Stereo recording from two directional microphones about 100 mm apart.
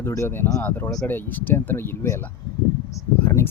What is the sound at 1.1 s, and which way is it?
Speech, 20° left (ahead or behind).